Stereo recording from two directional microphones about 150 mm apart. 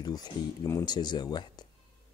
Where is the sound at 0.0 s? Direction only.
25° left (ahead or behind).